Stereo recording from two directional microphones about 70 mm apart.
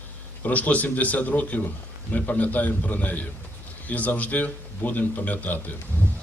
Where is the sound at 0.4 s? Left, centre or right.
Left.